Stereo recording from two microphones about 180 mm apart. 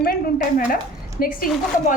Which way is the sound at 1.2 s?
55° left (ahead or behind).